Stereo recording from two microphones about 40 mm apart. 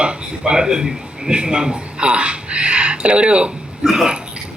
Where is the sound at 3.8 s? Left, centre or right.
Centre.